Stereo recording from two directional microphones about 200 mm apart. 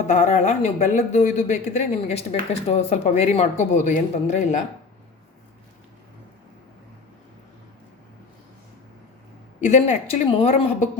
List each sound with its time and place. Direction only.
0.1 s speech: 35° left (ahead or behind)
9.6 s speech: 35° left (ahead or behind)